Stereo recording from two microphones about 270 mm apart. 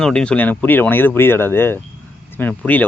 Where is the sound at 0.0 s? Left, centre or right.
Centre.